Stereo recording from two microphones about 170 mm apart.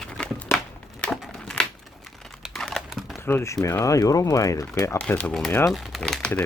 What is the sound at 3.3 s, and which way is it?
Speech, 15° left (ahead or behind).